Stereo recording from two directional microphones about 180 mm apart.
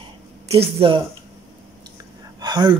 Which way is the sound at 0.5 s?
30° right (ahead or behind).